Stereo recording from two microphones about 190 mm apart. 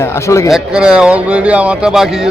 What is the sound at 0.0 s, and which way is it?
Speech, 15° left (ahead or behind).